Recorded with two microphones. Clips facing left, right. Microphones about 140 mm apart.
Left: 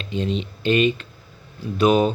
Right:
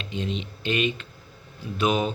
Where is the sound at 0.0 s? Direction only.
35° left (ahead or behind).